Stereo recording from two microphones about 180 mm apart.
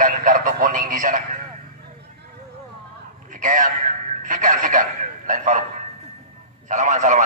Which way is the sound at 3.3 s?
45° right (ahead or behind).